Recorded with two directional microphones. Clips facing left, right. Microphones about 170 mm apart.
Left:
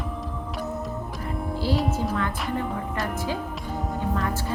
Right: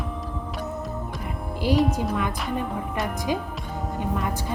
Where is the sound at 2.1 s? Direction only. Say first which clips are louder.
Even; 15° right (ahead or behind).